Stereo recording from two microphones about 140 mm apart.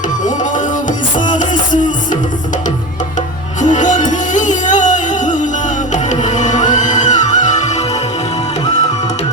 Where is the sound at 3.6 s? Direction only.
60° left (ahead or behind).